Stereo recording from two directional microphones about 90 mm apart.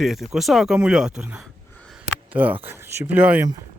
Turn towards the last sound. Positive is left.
turn(degrees=-20)  # may be behind; listen again after turning